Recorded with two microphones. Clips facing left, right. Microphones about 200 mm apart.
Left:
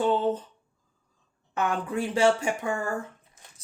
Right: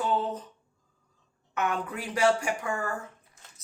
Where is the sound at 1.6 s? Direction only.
30° left (ahead or behind).